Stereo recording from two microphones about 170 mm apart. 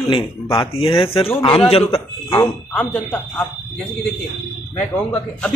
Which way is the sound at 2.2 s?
15° left (ahead or behind).